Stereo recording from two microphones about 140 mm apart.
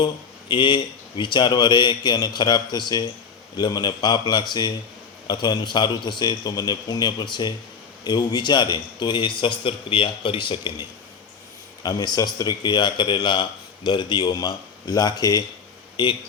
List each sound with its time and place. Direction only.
0.0 s a man's voice: 35° left (ahead or behind)